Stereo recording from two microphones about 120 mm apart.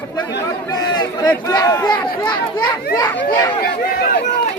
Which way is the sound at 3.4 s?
40° left (ahead or behind).